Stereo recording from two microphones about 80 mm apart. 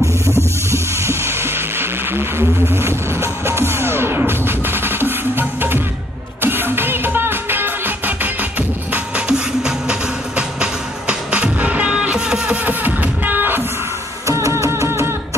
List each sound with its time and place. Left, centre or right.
0.7 s vehicle: right
6.4 s music: right
9.3 s music: centre; by 13.7 s right
14.2 s music: right